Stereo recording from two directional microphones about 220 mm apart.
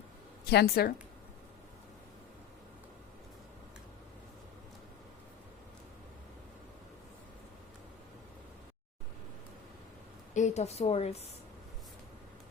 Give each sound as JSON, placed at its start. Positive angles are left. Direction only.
{"t": 0.5, "sound": "a woman's voice", "side_deg": 45}
{"t": 10.3, "sound": "a woman's voice", "side_deg": 30}